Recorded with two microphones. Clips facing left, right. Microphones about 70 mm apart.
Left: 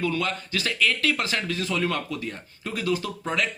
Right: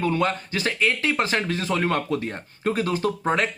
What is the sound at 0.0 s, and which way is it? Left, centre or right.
Speech, right.